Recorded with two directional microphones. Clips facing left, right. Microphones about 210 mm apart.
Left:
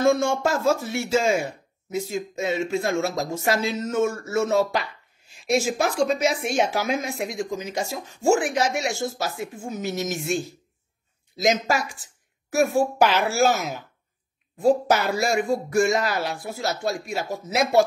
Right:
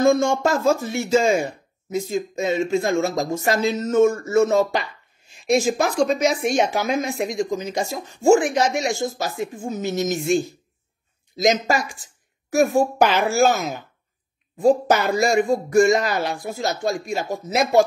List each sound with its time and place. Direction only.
0.0 s speech: 5° left (ahead or behind)